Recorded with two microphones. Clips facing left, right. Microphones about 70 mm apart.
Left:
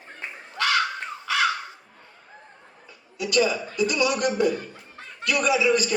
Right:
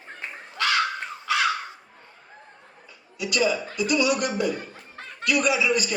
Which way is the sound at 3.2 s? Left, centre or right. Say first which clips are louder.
Left 1 dB; left.